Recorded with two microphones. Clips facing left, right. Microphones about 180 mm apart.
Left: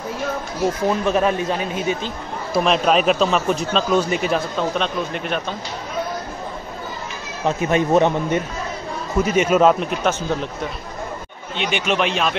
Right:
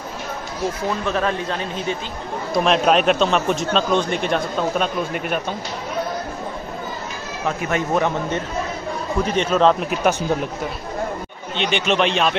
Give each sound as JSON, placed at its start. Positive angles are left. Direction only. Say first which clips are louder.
{"t": 1.0, "sound": "a man's voice", "louder": "left 3 dB", "side_deg": 10}
{"t": 2.5, "sound": "speech", "louder": "even", "side_deg": 0}
{"t": 7.4, "sound": "a man's voice", "louder": "left 4 dB", "side_deg": 20}
{"t": 9.2, "sound": "a man's voice", "louder": "left 2 dB", "side_deg": 10}
{"t": 9.8, "sound": "speech", "louder": "right 1 dB", "side_deg": -10}
{"t": 11.5, "sound": "a man's voice", "louder": "right 1 dB", "side_deg": 10}